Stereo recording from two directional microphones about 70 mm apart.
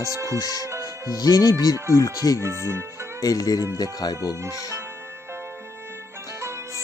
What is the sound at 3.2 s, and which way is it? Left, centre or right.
Speech, left.